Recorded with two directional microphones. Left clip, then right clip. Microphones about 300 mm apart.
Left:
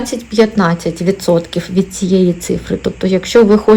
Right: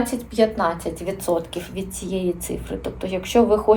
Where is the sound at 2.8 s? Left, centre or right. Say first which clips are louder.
Left 11 dB; left.